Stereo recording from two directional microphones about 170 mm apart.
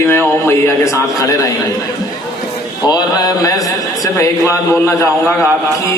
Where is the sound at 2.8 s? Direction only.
20° left (ahead or behind).